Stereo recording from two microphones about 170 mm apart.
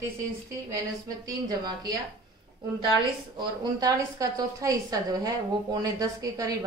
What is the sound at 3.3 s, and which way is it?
A woman's voice, 25° right (ahead or behind).